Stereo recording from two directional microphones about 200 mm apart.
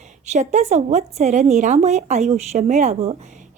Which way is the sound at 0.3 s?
35° right (ahead or behind).